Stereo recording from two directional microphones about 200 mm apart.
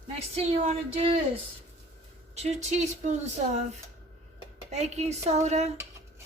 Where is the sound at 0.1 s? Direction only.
30° right (ahead or behind).